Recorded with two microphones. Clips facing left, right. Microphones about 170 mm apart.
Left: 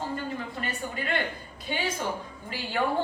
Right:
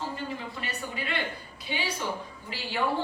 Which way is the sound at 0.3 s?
50° left (ahead or behind).